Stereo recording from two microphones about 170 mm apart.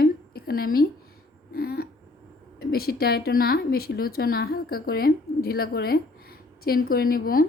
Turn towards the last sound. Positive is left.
turn(degrees=60)  # may be behind; listen again after turning